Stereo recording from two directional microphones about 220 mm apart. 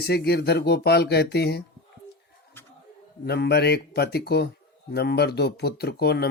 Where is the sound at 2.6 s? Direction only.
10° left (ahead or behind).